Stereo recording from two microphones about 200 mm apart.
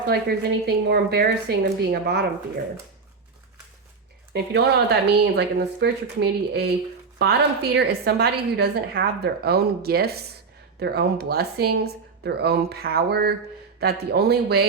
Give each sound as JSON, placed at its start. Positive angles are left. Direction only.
{"t": 0.1, "sound": "a woman's voice", "side_deg": -50}
{"t": 4.4, "sound": "a woman's voice", "side_deg": -55}